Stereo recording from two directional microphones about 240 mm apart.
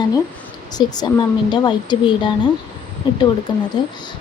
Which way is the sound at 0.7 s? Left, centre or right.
Centre.